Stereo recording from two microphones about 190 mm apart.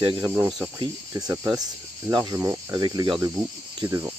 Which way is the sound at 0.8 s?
20° right (ahead or behind).